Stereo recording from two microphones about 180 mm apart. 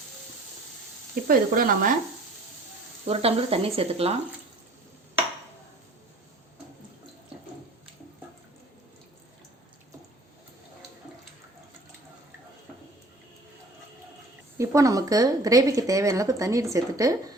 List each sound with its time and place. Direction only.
1.3 s speech: 50° right (ahead or behind)
3.1 s speech: 35° right (ahead or behind)
14.6 s speech: 15° right (ahead or behind)